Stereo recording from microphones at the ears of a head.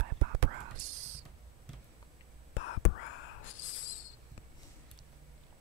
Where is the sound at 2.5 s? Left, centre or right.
Left.